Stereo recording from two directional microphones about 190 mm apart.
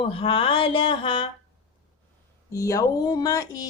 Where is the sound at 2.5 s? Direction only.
15° left (ahead or behind).